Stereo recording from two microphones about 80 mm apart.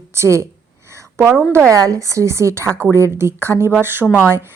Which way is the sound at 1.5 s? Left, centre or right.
Right.